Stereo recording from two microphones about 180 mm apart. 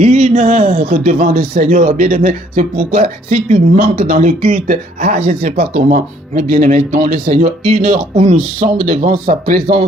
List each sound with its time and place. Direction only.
0.0 s speech: 35° right (ahead or behind)